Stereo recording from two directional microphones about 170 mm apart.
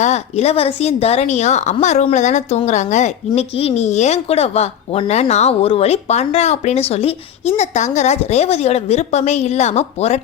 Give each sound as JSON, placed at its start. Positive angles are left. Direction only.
{"t": 0.0, "sound": "a woman's voice", "side_deg": 40}